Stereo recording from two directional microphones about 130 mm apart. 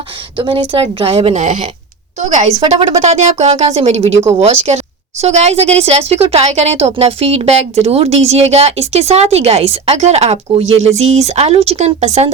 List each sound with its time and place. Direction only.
0.3 s a woman's voice: 40° right (ahead or behind); by 2.5 s 65° right (ahead or behind)
2.6 s a woman's voice: 45° right (ahead or behind)
3.0 s speech: 60° right (ahead or behind)